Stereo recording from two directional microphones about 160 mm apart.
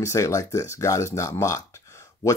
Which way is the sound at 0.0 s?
20° left (ahead or behind).